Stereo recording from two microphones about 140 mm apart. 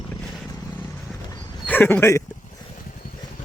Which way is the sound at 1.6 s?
10° left (ahead or behind).